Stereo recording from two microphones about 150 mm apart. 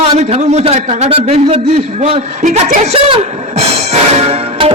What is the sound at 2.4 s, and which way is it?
Speech, 55° right (ahead or behind).